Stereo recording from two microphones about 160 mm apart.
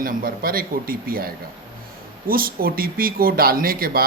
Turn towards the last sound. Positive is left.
turn(degrees=-65)  # may be behind; listen again after turning